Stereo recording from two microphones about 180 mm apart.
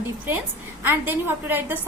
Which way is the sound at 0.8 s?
10° right (ahead or behind).